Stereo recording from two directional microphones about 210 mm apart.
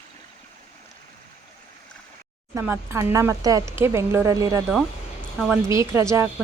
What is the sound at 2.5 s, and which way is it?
Speech, 10° right (ahead or behind).